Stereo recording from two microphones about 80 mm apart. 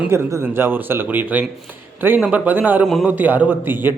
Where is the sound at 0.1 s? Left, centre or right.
Right.